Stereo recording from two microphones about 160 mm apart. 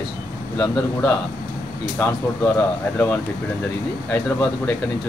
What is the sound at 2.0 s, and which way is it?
Speech, 10° left (ahead or behind).